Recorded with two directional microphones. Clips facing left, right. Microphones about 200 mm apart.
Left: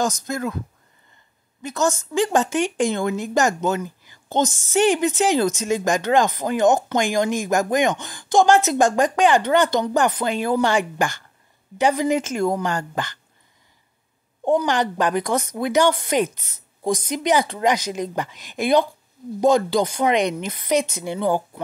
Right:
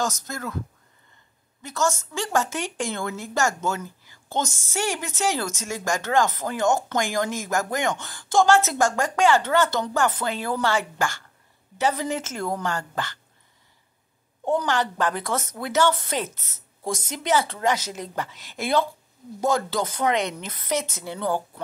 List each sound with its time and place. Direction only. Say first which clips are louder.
0.0 s a woman's voice: left 5 dB; 15° left (ahead or behind)
1.6 s a woman's voice: left 3 dB; 15° left (ahead or behind)
14.4 s a woman's voice: left 4 dB; 15° left (ahead or behind)